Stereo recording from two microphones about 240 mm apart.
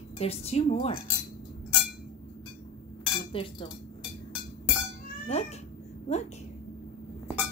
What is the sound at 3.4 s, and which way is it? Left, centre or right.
Cutlery, left.